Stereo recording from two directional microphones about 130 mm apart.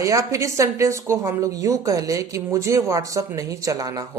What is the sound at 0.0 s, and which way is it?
A woman's voice, 25° right (ahead or behind).